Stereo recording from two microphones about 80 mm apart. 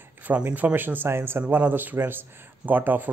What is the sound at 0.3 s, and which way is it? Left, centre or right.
Speech, centre.